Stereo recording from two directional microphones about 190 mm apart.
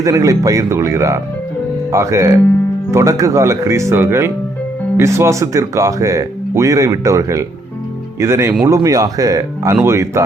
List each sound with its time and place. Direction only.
0.0 s speech: 15° right (ahead or behind)